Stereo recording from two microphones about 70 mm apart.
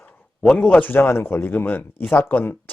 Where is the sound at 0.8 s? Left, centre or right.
Left.